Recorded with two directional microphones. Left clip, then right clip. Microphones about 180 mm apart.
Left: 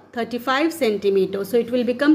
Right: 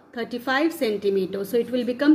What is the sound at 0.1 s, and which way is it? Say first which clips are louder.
A woman's voice: left 3 dB; 20° left (ahead or behind).